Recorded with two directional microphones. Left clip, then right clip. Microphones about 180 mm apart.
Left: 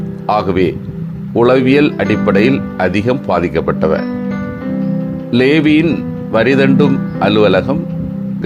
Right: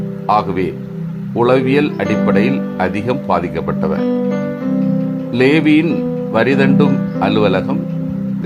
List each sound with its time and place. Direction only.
0.3 s speech: 20° left (ahead or behind)
5.3 s speech: 20° left (ahead or behind)